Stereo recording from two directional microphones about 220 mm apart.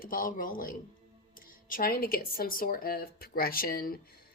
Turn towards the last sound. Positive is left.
turn(degrees=45)  # may be behind; listen again after turning